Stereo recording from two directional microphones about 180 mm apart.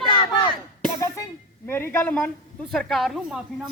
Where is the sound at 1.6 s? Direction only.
10° left (ahead or behind).